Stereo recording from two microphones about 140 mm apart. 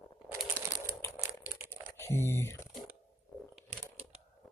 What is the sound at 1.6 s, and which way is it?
Typing, 15° left (ahead or behind).